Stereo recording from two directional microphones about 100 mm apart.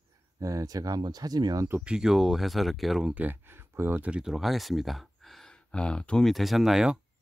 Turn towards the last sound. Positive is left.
turn(degrees=-5)  # may be behind; listen again after turning